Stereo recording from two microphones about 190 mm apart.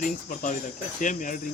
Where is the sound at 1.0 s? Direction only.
40° left (ahead or behind).